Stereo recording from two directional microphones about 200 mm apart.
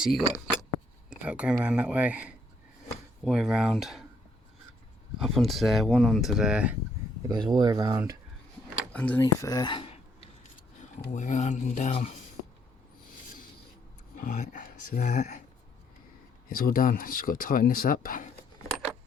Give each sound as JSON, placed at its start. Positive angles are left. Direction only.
{"t": 0.0, "sound": "speech", "side_deg": 0}
{"t": 5.2, "sound": "speech", "side_deg": 0}
{"t": 7.3, "sound": "speech", "side_deg": -20}
{"t": 8.9, "sound": "speech", "side_deg": 5}
{"t": 14.2, "sound": "speech", "side_deg": 40}
{"t": 16.5, "sound": "speech", "side_deg": 45}